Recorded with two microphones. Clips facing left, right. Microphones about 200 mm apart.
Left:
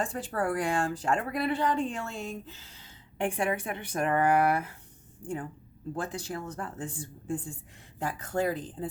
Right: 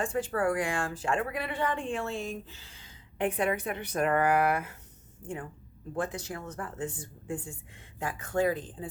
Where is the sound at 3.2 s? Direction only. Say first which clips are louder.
Right 1 dB; 30° left (ahead or behind).